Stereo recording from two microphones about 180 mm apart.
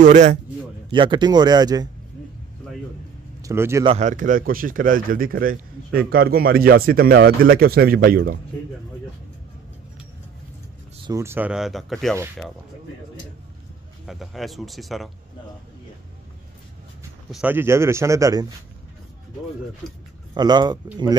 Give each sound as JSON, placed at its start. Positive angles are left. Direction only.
{"t": 0.0, "sound": "a man's voice", "side_deg": -40}
{"t": 0.9, "sound": "speech", "side_deg": -25}
{"t": 3.4, "sound": "a man's voice", "side_deg": -15}
{"t": 3.8, "sound": "a man's voice", "side_deg": -35}
{"t": 11.1, "sound": "speech", "side_deg": -15}
{"t": 14.0, "sound": "speech", "side_deg": 0}
{"t": 17.3, "sound": "a man's voice", "side_deg": -10}
{"t": 20.3, "sound": "speech", "side_deg": -25}